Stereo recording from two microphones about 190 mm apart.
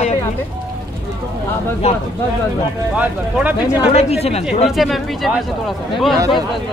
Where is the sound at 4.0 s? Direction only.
35° left (ahead or behind).